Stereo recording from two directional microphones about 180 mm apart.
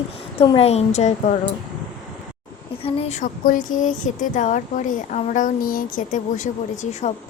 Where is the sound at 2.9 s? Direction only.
35° left (ahead or behind).